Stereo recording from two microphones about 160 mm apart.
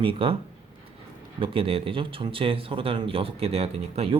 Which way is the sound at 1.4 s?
35° right (ahead or behind).